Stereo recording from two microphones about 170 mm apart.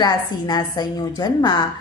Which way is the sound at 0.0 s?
25° left (ahead or behind).